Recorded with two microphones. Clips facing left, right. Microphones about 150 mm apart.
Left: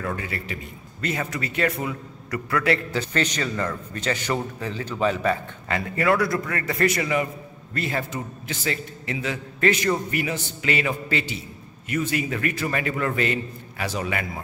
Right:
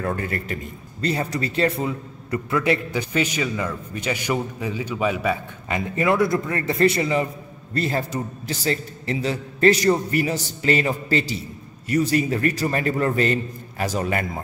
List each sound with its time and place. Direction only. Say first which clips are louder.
0.0 s a man's voice: right 4 dB; 45° right (ahead or behind)
1.0 s a man's voice: right 4 dB; 30° right (ahead or behind)